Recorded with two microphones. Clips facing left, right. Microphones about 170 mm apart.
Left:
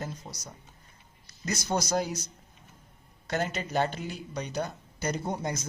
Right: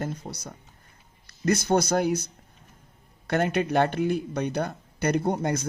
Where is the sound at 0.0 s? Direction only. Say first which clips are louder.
Right 6 dB; 60° right (ahead or behind).